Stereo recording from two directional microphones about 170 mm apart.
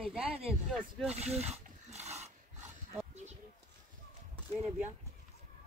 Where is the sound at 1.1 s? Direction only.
40° right (ahead or behind).